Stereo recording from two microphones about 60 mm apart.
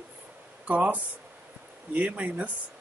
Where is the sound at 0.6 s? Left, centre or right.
Right.